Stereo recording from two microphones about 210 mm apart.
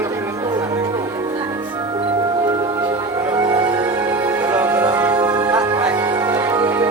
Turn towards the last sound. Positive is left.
turn(degrees=-10)  # may be behind; listen again after turning